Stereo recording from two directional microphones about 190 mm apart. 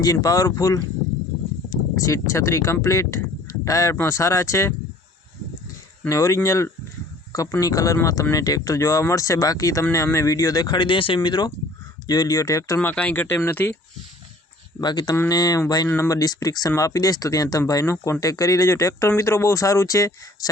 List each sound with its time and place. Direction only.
0.0 s speech: 20° left (ahead or behind)
6.1 s speech: 15° left (ahead or behind)
14.8 s speech: 20° left (ahead or behind)